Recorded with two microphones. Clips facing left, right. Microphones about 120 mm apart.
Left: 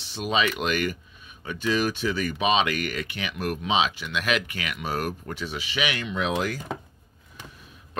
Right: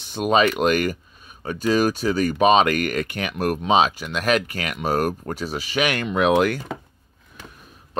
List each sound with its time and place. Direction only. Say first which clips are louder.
0.0 s speech: right 7 dB; 50° right (ahead or behind); by 6.6 s 65° right (ahead or behind)